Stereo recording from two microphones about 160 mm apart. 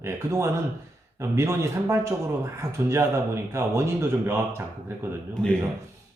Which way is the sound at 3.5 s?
15° right (ahead or behind).